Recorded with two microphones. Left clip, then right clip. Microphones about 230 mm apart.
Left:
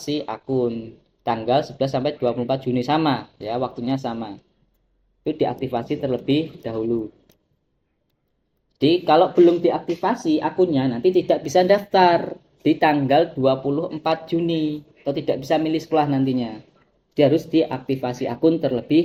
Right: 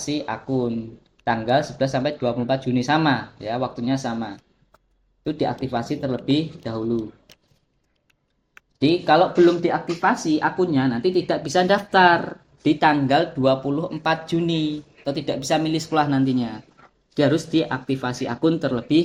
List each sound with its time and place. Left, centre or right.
0.1 s speech: right
9.1 s speech: right